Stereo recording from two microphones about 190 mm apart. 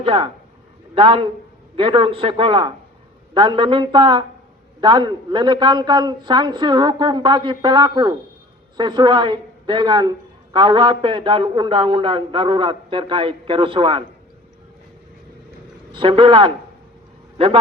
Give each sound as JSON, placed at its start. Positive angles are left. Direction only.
{"t": 0.0, "sound": "a man's voice", "side_deg": -30}
{"t": 15.9, "sound": "a man's voice", "side_deg": -25}